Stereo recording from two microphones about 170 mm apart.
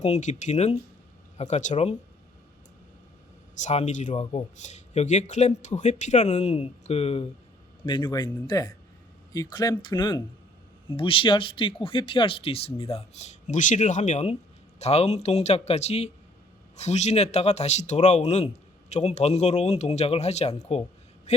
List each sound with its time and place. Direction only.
0.0 s speech: 40° left (ahead or behind)
3.6 s speech: 45° left (ahead or behind)
21.3 s a sound: 40° left (ahead or behind)